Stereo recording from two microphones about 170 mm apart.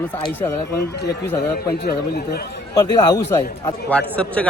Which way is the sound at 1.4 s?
70° left (ahead or behind).